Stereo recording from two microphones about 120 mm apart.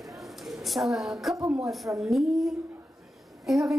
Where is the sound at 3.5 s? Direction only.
Centre (ahead or behind).